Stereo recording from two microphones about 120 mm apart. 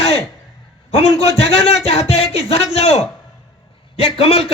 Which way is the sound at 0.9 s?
60° left (ahead or behind).